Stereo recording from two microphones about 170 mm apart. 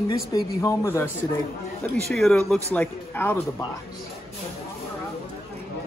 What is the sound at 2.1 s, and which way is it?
Speech, centre (ahead or behind).